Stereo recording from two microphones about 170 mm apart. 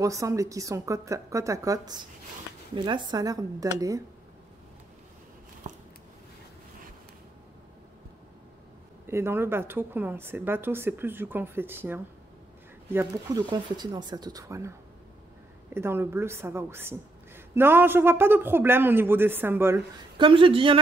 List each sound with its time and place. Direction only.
0.0 s speech: 20° right (ahead or behind)
9.0 s speech: 15° right (ahead or behind)
13.5 s speech: 25° right (ahead or behind)
15.7 s speech: 15° right (ahead or behind)
20.2 s speech: 30° right (ahead or behind)